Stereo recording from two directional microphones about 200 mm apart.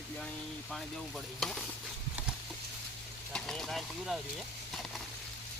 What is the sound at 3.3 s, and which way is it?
Speech, centre (ahead or behind).